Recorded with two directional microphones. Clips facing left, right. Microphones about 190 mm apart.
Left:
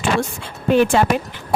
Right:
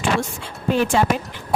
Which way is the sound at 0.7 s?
60° left (ahead or behind).